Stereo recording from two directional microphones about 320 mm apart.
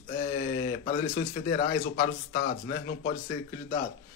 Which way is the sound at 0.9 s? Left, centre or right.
Left.